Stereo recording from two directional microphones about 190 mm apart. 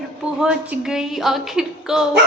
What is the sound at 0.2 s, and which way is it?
A woman's voice, 5° right (ahead or behind).